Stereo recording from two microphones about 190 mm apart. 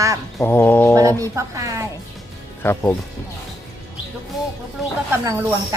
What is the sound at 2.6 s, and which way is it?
Speech, 10° left (ahead or behind).